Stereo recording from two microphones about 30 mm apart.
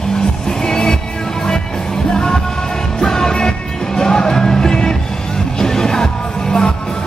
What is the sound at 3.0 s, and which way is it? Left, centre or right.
Music, centre.